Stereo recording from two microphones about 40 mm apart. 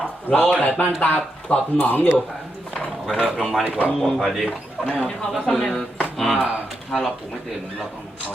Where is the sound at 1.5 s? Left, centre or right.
Left.